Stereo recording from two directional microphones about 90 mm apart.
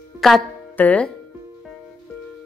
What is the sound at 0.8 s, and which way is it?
Speech, 15° left (ahead or behind).